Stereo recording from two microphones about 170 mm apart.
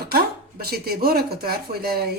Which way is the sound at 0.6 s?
65° right (ahead or behind).